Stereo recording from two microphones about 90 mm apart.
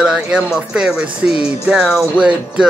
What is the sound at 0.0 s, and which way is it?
Music, 10° right (ahead or behind).